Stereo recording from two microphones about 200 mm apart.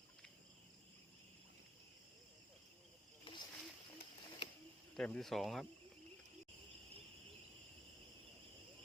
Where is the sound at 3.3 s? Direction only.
25° left (ahead or behind).